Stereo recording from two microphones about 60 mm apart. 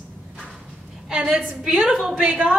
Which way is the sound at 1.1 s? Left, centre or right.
Centre.